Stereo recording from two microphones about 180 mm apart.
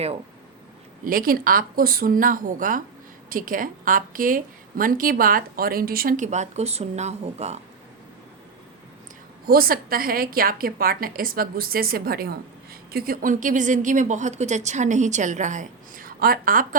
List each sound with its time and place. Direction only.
1.0 s a woman's voice: 50° right (ahead or behind)
9.5 s a woman's voice: 55° right (ahead or behind)